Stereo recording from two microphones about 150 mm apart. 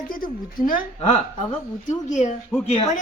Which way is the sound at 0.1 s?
70° left (ahead or behind).